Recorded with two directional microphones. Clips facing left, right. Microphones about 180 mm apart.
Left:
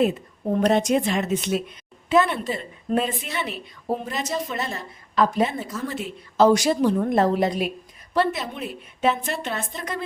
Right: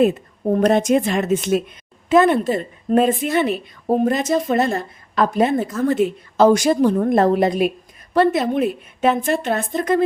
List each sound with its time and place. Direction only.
0.5 s a woman's voice: 50° right (ahead or behind)